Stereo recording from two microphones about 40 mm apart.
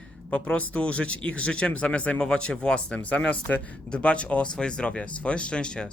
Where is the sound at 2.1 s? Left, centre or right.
Left.